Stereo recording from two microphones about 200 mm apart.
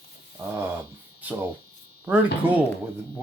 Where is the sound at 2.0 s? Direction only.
10° right (ahead or behind).